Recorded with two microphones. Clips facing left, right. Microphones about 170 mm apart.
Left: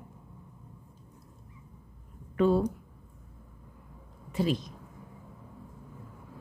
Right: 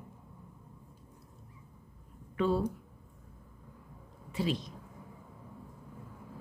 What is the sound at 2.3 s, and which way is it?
Speech, 50° left (ahead or behind).